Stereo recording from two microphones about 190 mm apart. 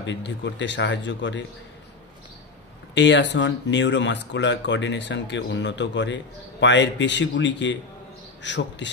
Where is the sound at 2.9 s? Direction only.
70° left (ahead or behind).